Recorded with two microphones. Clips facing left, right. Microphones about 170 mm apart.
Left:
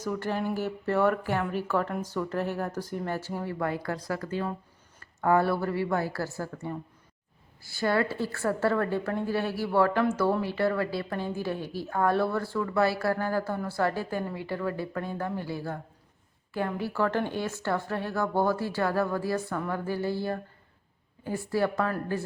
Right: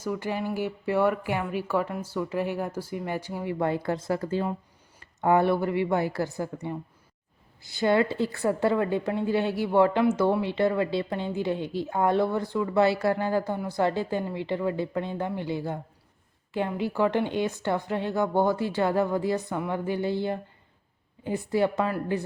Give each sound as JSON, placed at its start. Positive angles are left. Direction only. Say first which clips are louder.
{"t": 0.0, "sound": "speech", "louder": "even", "side_deg": -10}